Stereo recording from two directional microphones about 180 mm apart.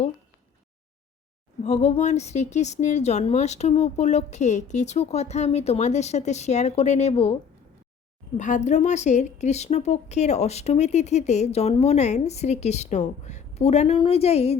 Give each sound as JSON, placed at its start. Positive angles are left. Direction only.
{"t": 1.6, "sound": "a woman's voice", "side_deg": 40}
{"t": 8.4, "sound": "a woman's voice", "side_deg": 45}